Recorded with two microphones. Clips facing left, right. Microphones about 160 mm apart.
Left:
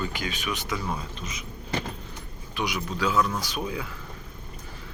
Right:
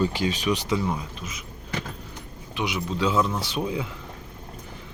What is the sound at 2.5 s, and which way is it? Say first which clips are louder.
Speech: right 2 dB; 20° right (ahead or behind).